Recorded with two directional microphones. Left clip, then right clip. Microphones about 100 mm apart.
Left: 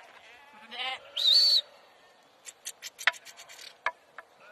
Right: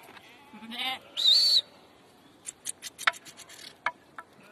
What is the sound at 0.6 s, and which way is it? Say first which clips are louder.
Speech: right 2 dB; 60° right (ahead or behind).